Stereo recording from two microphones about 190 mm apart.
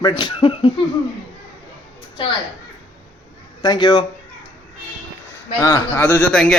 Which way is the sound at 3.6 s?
20° left (ahead or behind).